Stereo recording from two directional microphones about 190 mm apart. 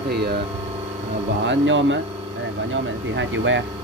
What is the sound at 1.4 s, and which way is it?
Speech, 75° right (ahead or behind).